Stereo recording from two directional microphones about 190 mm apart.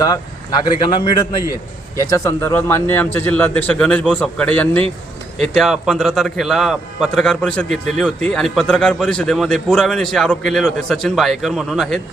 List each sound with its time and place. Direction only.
0.6 s a man's voice: 25° left (ahead or behind); by 11.9 s centre (ahead or behind)